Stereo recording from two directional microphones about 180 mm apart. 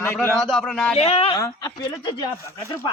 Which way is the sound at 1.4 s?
20° left (ahead or behind).